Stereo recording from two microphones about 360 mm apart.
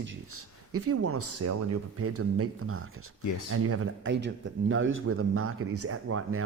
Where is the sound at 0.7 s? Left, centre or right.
Right.